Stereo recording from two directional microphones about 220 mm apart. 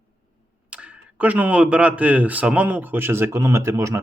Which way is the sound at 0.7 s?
5° right (ahead or behind).